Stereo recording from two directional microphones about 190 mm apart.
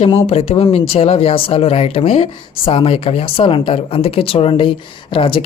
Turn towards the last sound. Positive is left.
turn(degrees=25)  # may be behind; listen again after turning